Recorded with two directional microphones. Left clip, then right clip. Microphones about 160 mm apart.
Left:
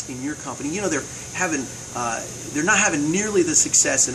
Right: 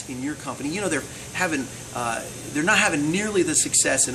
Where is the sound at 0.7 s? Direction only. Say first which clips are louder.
Left 2 dB; 10° right (ahead or behind).